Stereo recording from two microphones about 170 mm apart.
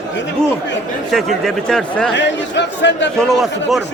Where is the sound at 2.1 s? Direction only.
90° left.